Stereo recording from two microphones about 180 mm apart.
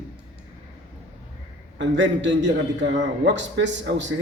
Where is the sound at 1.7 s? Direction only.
90° right.